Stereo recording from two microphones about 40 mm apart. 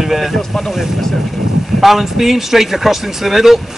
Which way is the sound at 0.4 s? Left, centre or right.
Centre.